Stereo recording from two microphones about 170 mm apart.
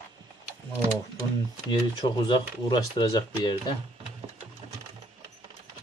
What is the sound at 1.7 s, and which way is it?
Speech, 30° left (ahead or behind).